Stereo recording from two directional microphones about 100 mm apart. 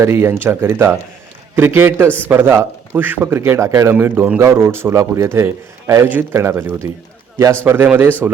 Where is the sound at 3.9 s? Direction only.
15° right (ahead or behind).